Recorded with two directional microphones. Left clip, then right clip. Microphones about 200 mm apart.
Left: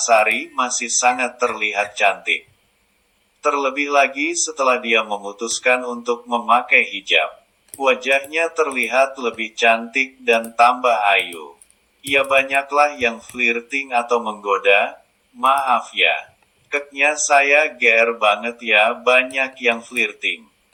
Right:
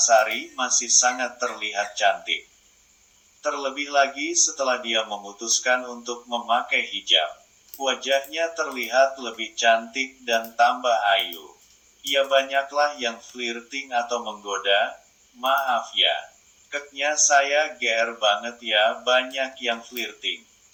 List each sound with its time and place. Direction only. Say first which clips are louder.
0.0 s a man's voice: left 4 dB; 15° left (ahead or behind)
3.4 s a man's voice: left 8 dB; 15° left (ahead or behind)